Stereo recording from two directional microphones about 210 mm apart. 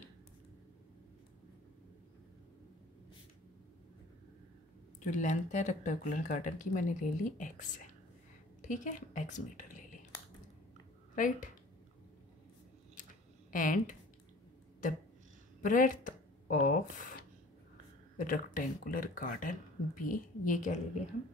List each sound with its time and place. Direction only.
5.0 s speech: 35° left (ahead or behind)
11.1 s speech: 40° left (ahead or behind)
13.5 s speech: 40° left (ahead or behind)
15.6 s a sound: 40° left (ahead or behind)
18.1 s speech: 40° left (ahead or behind)